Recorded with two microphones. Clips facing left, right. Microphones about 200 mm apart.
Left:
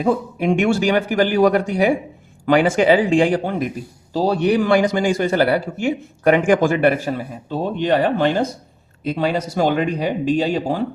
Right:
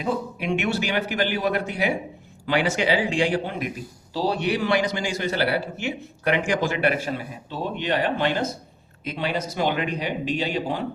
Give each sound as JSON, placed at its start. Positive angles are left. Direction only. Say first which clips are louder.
{"t": 0.0, "sound": "a man's voice", "louder": "left 8 dB", "side_deg": 50}